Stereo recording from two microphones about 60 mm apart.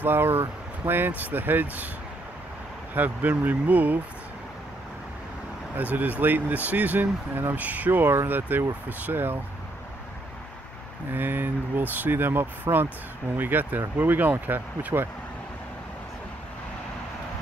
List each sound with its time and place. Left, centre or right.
0.0 s speech: right
2.9 s speech: right
5.8 s speech: right
11.1 s speech: right